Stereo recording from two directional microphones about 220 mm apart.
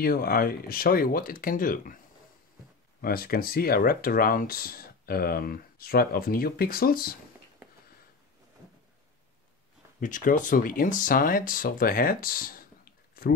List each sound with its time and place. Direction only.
0.0 s speech: 40° left (ahead or behind)
3.0 s speech: 40° left (ahead or behind)
9.9 s speech: 35° left (ahead or behind)